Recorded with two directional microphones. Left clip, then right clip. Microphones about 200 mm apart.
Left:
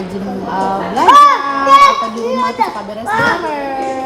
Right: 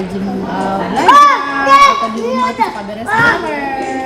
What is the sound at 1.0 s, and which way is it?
Crowd, 40° left (ahead or behind).